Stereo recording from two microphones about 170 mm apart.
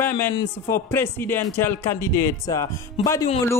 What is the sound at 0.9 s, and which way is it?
Speech, 10° left (ahead or behind).